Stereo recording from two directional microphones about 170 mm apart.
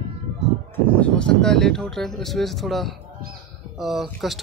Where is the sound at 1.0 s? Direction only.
5° left (ahead or behind).